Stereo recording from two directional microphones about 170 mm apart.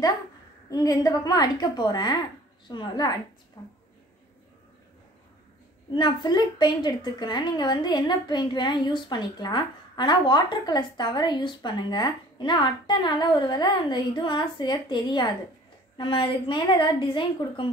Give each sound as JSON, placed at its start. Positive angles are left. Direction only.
{"t": 0.7, "sound": "a woman's voice", "side_deg": 20}
{"t": 5.9, "sound": "a woman's voice", "side_deg": 25}